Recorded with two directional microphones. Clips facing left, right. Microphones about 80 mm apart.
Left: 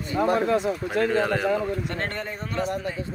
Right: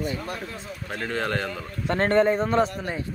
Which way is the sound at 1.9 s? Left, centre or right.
Right.